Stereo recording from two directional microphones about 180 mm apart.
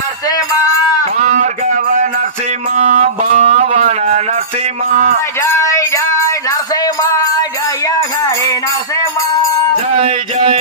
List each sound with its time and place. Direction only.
0.3 s music: 20° left (ahead or behind)
1.2 s a sound: 45° right (ahead or behind)
2.7 s music: 40° right (ahead or behind)
5.4 s music: 15° left (ahead or behind)
10.0 s music: 35° right (ahead or behind)